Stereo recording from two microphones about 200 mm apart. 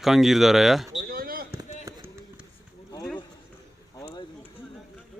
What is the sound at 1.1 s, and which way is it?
Basketball bounce, 45° right (ahead or behind).